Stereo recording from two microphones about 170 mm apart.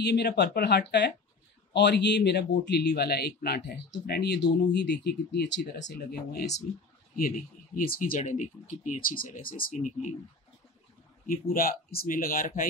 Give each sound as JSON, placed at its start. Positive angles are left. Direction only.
{"t": 0.0, "sound": "speech", "side_deg": 75}
{"t": 7.2, "sound": "speech", "side_deg": 60}
{"t": 9.8, "sound": "speech", "side_deg": 45}
{"t": 11.2, "sound": "speech", "side_deg": 55}